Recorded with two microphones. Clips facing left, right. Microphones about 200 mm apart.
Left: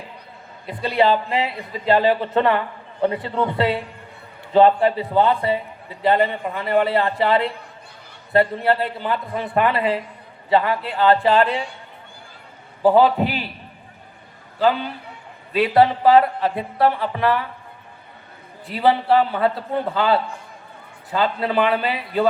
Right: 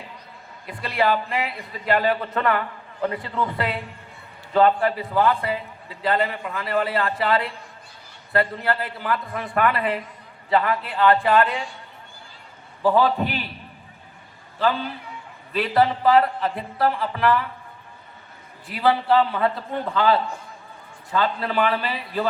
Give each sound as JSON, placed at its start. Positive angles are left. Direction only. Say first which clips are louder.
{"t": 0.7, "sound": "a man's voice", "louder": "left 4 dB", "side_deg": 25}
{"t": 12.8, "sound": "a man's voice", "louder": "left 4 dB", "side_deg": 25}
{"t": 15.5, "sound": "a man's voice", "louder": "left 4 dB", "side_deg": 25}
{"t": 18.7, "sound": "a man's voice", "louder": "left 2 dB", "side_deg": 25}